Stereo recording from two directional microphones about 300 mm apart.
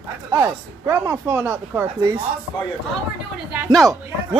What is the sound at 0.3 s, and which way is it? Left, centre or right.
Speech, centre.